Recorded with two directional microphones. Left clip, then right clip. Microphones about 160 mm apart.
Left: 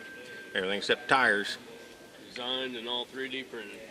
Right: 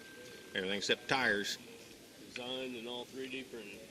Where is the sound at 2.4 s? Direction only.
35° left (ahead or behind).